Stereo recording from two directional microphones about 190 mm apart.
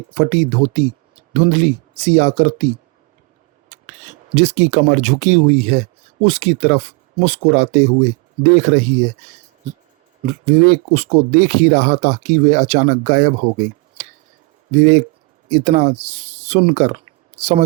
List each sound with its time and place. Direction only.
0.1 s speech: 40° right (ahead or behind)
3.7 s speech: 40° right (ahead or behind)
14.7 s speech: 40° right (ahead or behind)